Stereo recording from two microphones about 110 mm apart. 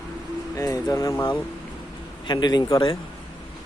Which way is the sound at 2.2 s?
40° left (ahead or behind).